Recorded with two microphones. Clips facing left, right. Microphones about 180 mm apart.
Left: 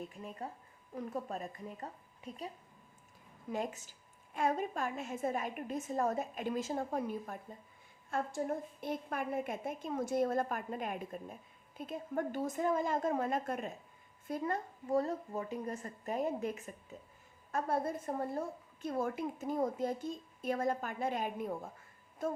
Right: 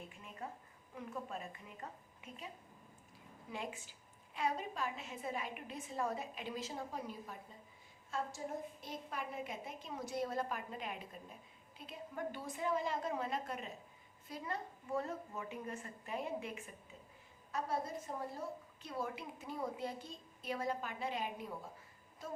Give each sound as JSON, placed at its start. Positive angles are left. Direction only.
{"t": 0.1, "sound": "a woman's voice", "side_deg": 40}
{"t": 3.5, "sound": "a woman's voice", "side_deg": 40}
{"t": 17.5, "sound": "a woman's voice", "side_deg": 55}